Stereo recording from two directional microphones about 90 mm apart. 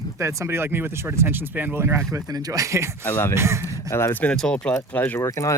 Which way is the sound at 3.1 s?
25° left (ahead or behind).